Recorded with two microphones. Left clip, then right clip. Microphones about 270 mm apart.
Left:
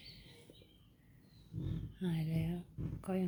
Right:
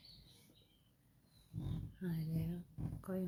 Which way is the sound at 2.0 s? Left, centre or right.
Centre.